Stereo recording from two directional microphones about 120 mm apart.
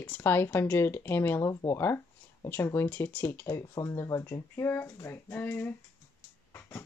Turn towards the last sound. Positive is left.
turn(degrees=15)  # may be behind; listen again after turning